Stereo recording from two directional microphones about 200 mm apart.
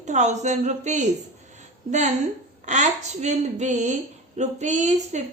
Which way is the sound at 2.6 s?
35° right (ahead or behind).